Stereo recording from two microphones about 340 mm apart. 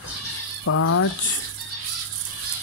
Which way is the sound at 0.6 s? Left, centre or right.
Left.